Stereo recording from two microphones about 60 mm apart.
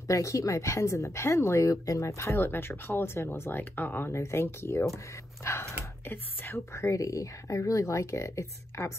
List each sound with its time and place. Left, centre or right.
0.1 s speech: left
1.7 s speech: left
4.1 s speech: left
6.0 s speech: left
6.7 s speech: left